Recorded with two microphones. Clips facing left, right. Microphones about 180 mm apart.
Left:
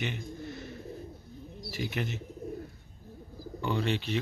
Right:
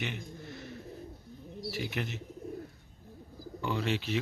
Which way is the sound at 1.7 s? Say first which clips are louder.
Left 2 dB; centre (ahead or behind).